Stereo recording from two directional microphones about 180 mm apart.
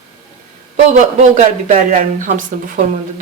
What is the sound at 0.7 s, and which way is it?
A man's voice, 40° right (ahead or behind).